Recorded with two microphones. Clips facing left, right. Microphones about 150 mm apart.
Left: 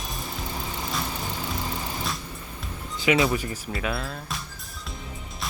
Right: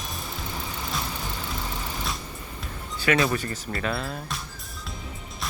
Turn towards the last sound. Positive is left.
turn(degrees=0)  # may be behind; listen again after turning